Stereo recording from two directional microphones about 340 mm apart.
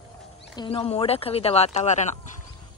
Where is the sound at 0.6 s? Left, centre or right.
Centre.